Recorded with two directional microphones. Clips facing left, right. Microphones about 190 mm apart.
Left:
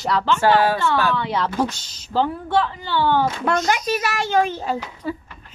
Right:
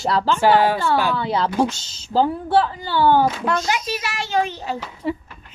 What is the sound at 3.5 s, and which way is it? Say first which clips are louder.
A child's voice: left 2 dB; 50° left (ahead or behind).